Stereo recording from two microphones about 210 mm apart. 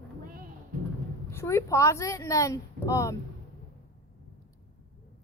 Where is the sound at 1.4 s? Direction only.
15° left (ahead or behind).